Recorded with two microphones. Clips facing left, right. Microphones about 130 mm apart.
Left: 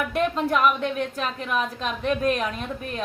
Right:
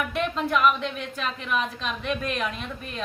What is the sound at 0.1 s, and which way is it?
A woman's voice, 40° left (ahead or behind).